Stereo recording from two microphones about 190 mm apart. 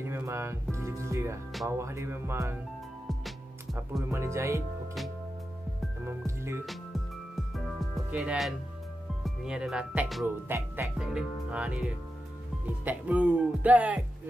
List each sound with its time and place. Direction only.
0.0 s speech: 15° right (ahead or behind)
4.1 s speech: 15° right (ahead or behind)
6.0 s speech: 15° right (ahead or behind)
6.6 s music: centre (ahead or behind)
9.2 s speech: 5° right (ahead or behind)
11.1 s music: 5° right (ahead or behind)
12.6 s speech: 10° right (ahead or behind)